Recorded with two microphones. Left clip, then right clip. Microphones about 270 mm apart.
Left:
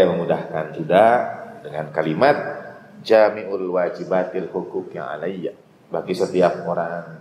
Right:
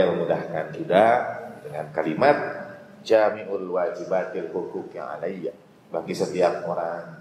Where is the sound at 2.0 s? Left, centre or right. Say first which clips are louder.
Left 3 dB; left.